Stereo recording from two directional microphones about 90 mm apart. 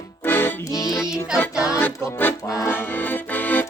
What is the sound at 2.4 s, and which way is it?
Accordion, 35° left (ahead or behind).